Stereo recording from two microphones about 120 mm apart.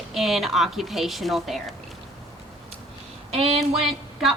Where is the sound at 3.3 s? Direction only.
55° right (ahead or behind).